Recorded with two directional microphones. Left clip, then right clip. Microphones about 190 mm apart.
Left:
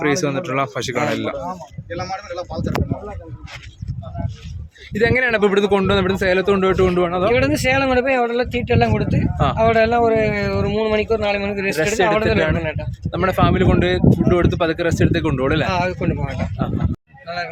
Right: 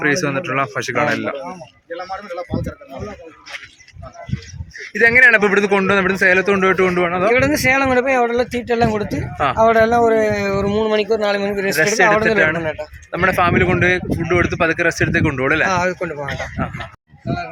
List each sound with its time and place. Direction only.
0.0 s speech: 10° left (ahead or behind)
2.0 s speech: 45° right (ahead or behind)
4.9 s speech: 5° left (ahead or behind)
7.3 s speech: 10° right (ahead or behind)
7.7 s a man's voice: 20° right (ahead or behind)
13.1 s speech: 5° left (ahead or behind)
15.6 s speech: 10° right (ahead or behind)
16.6 s speech: 5° left (ahead or behind)